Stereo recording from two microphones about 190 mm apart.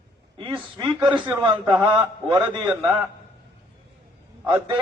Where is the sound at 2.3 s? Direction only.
25° right (ahead or behind).